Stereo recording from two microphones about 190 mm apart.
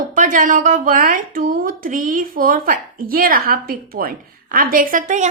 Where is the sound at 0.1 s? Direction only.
45° right (ahead or behind).